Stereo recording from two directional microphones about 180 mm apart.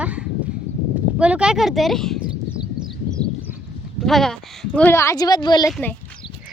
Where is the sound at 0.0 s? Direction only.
5° right (ahead or behind).